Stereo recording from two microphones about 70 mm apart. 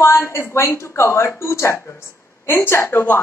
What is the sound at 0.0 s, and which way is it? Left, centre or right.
A woman's voice, left.